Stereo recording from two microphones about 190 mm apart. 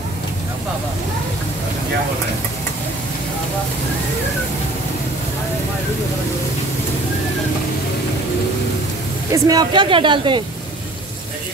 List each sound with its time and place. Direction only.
9.3 s speech: 20° right (ahead or behind)